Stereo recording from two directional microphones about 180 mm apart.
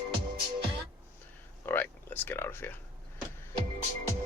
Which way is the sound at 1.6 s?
10° left (ahead or behind).